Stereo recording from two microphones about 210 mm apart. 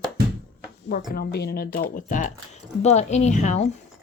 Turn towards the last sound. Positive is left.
turn(degrees=30)  # may be behind; listen again after turning